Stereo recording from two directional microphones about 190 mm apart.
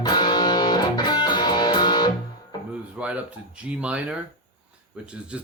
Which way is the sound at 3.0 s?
5° right (ahead or behind).